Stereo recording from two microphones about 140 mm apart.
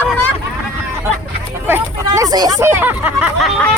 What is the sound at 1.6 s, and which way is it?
Speech, 15° right (ahead or behind).